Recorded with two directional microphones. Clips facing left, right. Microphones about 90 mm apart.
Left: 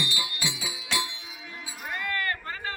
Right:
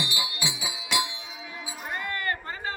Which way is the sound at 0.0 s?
20° right (ahead or behind).